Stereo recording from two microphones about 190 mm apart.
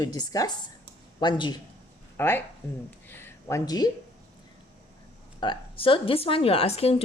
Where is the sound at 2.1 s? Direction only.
10° left (ahead or behind).